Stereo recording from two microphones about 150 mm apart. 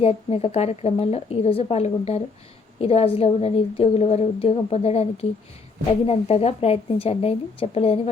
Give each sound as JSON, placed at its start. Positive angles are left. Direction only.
{"t": 0.0, "sound": "a woman's voice", "side_deg": 40}